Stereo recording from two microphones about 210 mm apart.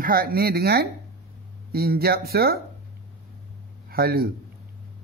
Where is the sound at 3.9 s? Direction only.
45° right (ahead or behind).